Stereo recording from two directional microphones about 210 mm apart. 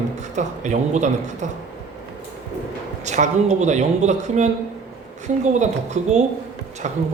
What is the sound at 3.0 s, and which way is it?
A man's voice, 35° right (ahead or behind).